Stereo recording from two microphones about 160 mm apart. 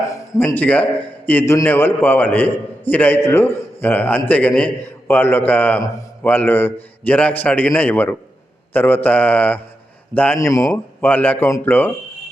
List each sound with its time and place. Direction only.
0.1 s a man's voice: 10° left (ahead or behind)